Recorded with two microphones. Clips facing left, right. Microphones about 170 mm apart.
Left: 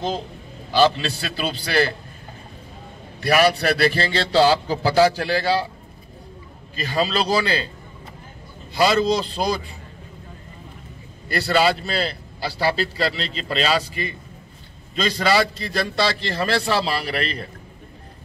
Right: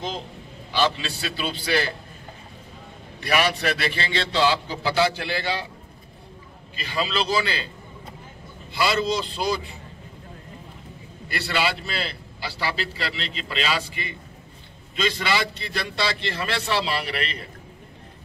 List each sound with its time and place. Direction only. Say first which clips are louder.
0.7 s a man's voice: left 6 dB; 40° left (ahead or behind)
3.2 s a man's voice: left 6 dB; 40° left (ahead or behind)
6.7 s a man's voice: left 5 dB; 40° left (ahead or behind)
8.7 s a man's voice: left 5 dB; 40° left (ahead or behind)
11.2 s a man's voice: left 7 dB; 40° left (ahead or behind)